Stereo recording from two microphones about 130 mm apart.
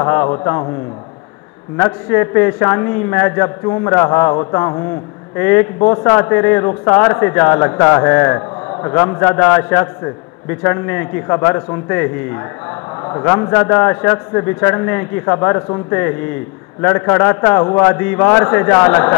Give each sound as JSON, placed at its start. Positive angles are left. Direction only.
{"t": 0.0, "sound": "a man's voice", "side_deg": 15}
{"t": 1.8, "sound": "a man's voice", "side_deg": 15}
{"t": 13.4, "sound": "a man's voice", "side_deg": 10}